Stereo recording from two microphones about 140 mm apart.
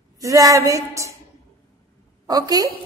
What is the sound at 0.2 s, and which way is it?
Speech, 25° right (ahead or behind).